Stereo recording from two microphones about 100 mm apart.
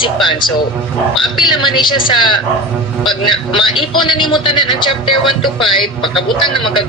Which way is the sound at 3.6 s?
55° left (ahead or behind).